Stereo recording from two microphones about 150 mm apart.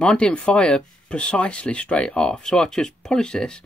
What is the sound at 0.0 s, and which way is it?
Speech, 5° left (ahead or behind).